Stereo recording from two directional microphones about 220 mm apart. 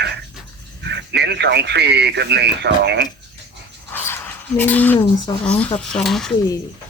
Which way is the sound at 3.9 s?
10° left (ahead or behind).